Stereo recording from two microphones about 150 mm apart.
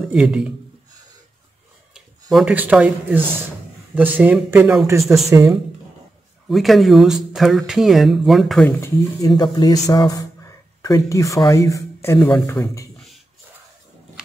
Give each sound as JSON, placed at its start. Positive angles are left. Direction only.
{"t": 0.1, "sound": "speech", "side_deg": -5}
{"t": 2.3, "sound": "speech", "side_deg": -10}
{"t": 5.3, "sound": "speech", "side_deg": -20}
{"t": 6.5, "sound": "speech", "side_deg": 0}
{"t": 8.6, "sound": "speech", "side_deg": 20}
{"t": 9.3, "sound": "speech", "side_deg": 30}
{"t": 12.2, "sound": "speech", "side_deg": 5}
{"t": 12.4, "sound": "speech", "side_deg": 20}